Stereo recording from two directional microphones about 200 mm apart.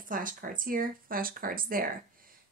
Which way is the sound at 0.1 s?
45° right (ahead or behind).